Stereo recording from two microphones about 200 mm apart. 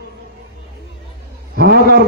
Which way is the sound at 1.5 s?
50° right (ahead or behind).